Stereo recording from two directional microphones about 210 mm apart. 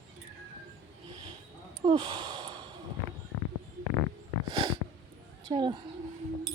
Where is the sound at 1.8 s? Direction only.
20° right (ahead or behind).